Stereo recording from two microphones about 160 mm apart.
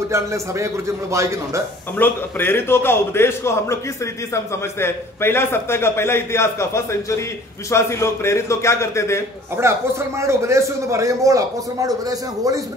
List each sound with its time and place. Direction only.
0.1 s a man's voice: 20° right (ahead or behind)
2.0 s a man's voice: 15° left (ahead or behind)
9.6 s a man's voice: 15° right (ahead or behind)